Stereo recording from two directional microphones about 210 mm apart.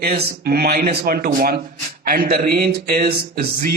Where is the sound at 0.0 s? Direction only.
45° right (ahead or behind).